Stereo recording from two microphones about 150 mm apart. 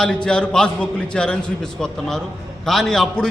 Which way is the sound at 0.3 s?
5° left (ahead or behind).